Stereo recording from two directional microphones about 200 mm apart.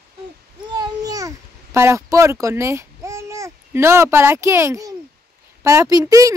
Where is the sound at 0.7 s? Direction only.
20° right (ahead or behind).